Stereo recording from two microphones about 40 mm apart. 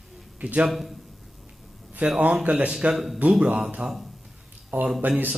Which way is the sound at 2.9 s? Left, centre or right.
Centre.